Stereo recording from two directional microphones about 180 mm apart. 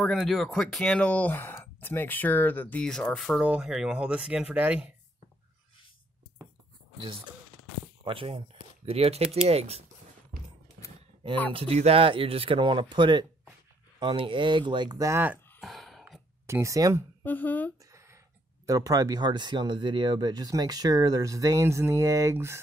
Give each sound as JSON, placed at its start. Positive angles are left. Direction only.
{"t": 0.0, "sound": "speech", "side_deg": 0}
{"t": 8.0, "sound": "speech", "side_deg": -30}
{"t": 11.5, "sound": "speech", "side_deg": -35}
{"t": 15.6, "sound": "a sound", "side_deg": 0}
{"t": 16.4, "sound": "speech", "side_deg": -15}
{"t": 17.2, "sound": "speech", "side_deg": 10}
{"t": 17.9, "sound": "a sound", "side_deg": -15}
{"t": 18.7, "sound": "speech", "side_deg": -20}